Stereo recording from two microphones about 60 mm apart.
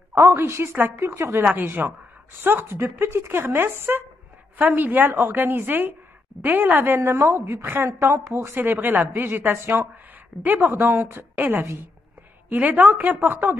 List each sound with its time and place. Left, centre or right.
0.1 s a woman's voice: right
1.4 s speech: right
7.2 s speech: right
7.6 s speech: right
11.6 s a woman's voice: right
12.4 s speech: right